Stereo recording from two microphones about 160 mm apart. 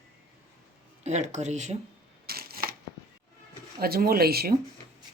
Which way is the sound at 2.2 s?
75° right (ahead or behind).